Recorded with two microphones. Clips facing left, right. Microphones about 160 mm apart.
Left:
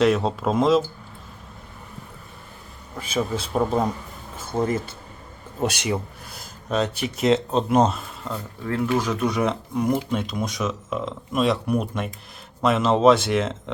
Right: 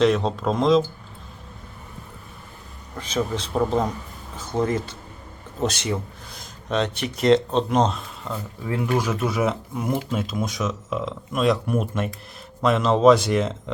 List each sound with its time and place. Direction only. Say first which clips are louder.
0.0 s speech: even; 5° left (ahead or behind)
3.0 s a man's voice: even; 10° left (ahead or behind)
8.6 s speech: left 1 dB; 15° right (ahead or behind)